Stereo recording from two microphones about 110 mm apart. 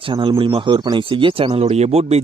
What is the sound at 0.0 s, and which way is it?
Speech, 50° right (ahead or behind).